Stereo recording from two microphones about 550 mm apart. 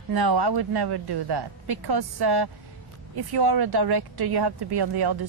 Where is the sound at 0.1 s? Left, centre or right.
Right.